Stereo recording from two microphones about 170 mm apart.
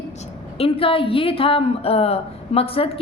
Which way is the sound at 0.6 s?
30° left (ahead or behind).